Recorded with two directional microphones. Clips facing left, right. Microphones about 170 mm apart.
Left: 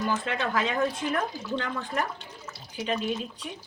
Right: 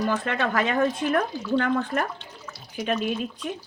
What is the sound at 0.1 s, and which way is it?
Speech, 60° right (ahead or behind).